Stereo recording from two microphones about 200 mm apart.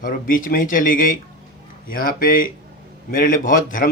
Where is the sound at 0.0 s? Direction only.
45° left (ahead or behind).